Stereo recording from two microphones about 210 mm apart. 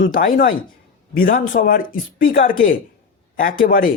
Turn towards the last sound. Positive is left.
turn(degrees=40)  # may be behind; listen again after turning